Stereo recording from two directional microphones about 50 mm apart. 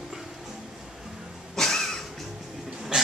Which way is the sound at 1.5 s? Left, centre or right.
Centre.